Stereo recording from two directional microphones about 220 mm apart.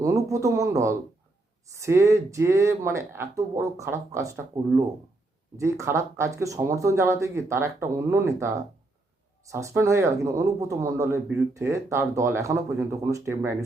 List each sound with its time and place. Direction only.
0.0 s speech: 15° right (ahead or behind)